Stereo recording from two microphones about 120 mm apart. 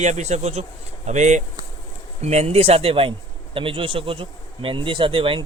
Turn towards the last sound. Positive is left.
turn(degrees=-45)  # may be behind; listen again after turning